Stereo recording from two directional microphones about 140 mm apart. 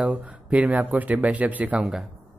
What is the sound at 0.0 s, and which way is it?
Speech, 10° right (ahead or behind).